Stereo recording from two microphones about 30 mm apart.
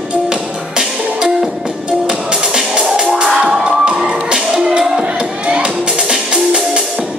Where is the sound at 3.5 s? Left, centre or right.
Right.